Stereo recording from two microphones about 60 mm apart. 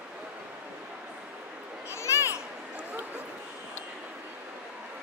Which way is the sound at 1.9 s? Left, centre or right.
Left.